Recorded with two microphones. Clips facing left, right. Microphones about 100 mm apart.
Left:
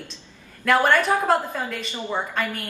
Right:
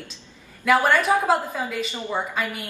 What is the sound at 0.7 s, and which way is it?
A woman's voice, 5° right (ahead or behind).